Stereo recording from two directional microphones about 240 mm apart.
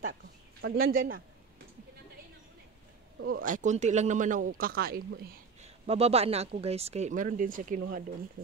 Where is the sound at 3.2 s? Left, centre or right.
Right.